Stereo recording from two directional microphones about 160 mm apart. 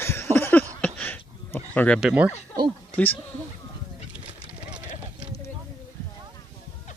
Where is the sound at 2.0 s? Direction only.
5° right (ahead or behind).